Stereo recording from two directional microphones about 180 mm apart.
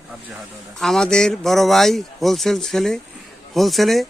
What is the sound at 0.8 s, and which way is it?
A man's voice, 5° left (ahead or behind).